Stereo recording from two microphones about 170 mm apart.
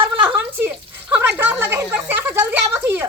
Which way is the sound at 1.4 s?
10° right (ahead or behind).